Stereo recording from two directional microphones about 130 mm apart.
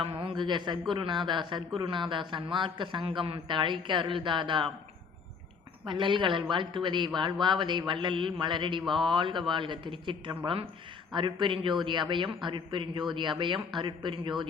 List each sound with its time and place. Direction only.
0.0 s a man's voice: 45° right (ahead or behind)
5.8 s a man's voice: 40° right (ahead or behind)